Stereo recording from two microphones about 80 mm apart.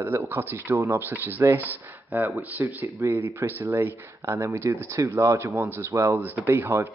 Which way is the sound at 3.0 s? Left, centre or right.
Right.